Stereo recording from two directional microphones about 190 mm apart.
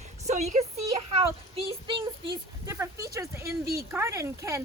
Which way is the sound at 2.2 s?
15° right (ahead or behind).